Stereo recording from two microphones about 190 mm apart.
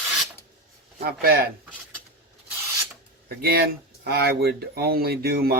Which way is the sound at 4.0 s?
55° right (ahead or behind).